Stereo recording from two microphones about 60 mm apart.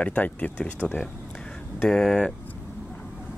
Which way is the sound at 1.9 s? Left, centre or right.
Centre.